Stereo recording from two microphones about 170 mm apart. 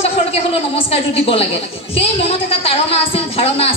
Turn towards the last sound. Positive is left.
turn(degrees=35)  # may be behind; listen again after turning